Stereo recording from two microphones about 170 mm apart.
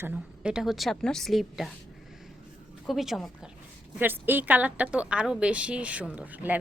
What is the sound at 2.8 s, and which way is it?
Speech, centre (ahead or behind).